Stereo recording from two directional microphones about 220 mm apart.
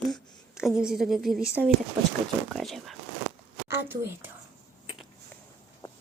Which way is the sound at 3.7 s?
10° right (ahead or behind).